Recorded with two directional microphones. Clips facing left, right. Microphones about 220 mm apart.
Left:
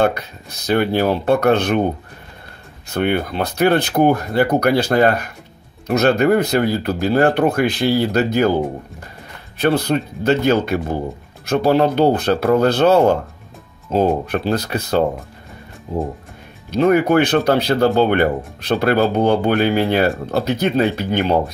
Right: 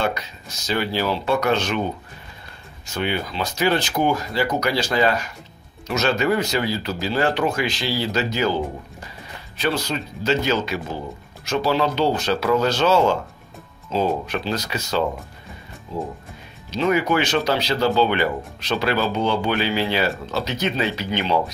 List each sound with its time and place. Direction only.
0.0 s speech: 60° left (ahead or behind)
2.9 s speech: 55° left (ahead or behind)